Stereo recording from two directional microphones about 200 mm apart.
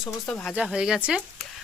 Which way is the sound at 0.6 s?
5° right (ahead or behind).